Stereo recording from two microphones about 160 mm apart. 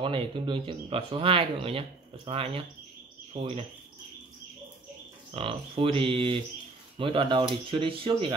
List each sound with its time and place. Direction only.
0.0 s speech: 35° right (ahead or behind)
3.3 s speech: 45° right (ahead or behind)
5.3 s speech: 35° right (ahead or behind)